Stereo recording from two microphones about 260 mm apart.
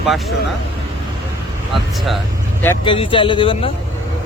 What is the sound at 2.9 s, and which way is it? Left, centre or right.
Speech, centre.